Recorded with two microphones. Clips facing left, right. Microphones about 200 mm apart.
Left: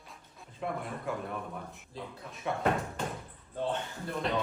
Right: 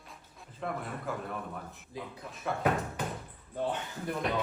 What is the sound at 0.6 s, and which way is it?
Speech, 5° left (ahead or behind).